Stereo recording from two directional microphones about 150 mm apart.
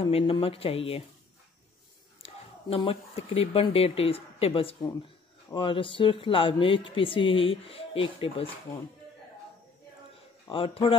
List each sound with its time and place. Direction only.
0.0 s speech: 35° left (ahead or behind)
2.2 s speech: 40° left (ahead or behind)
10.5 s speech: 40° left (ahead or behind)